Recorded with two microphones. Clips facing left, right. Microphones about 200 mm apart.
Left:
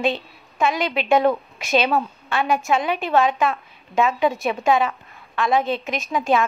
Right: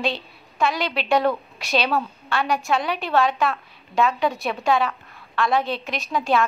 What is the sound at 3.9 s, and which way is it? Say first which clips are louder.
A woman's voice: left 2 dB; centre (ahead or behind).